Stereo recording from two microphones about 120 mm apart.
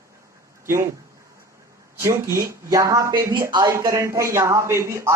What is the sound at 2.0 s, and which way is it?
Speech, 25° right (ahead or behind).